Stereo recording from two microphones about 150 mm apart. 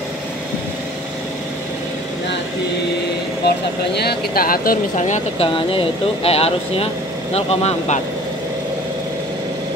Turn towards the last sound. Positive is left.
turn(degrees=45)  # may be behind; listen again after turning